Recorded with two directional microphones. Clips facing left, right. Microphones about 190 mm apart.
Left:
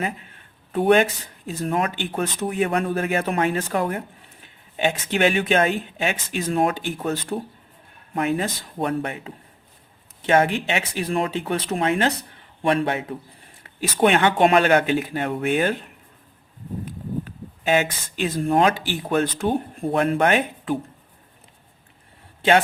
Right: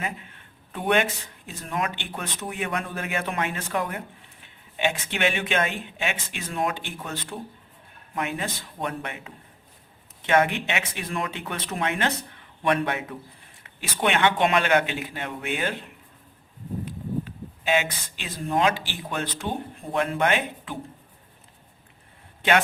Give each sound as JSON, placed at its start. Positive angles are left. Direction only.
{"t": 0.7, "sound": "speech", "side_deg": 40}
{"t": 13.6, "sound": "speech", "side_deg": 40}
{"t": 17.2, "sound": "speech", "side_deg": 45}
{"t": 22.4, "sound": "a sound", "side_deg": 35}